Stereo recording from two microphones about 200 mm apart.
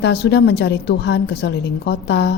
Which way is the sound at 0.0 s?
55° left (ahead or behind).